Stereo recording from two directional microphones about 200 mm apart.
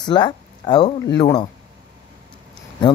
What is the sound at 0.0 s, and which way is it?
A man's voice, 20° left (ahead or behind).